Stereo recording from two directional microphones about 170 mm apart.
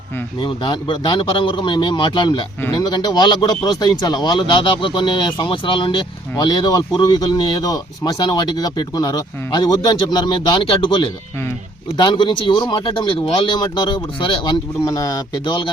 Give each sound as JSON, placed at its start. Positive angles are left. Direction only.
{"t": 0.3, "sound": "a man's voice", "side_deg": 30}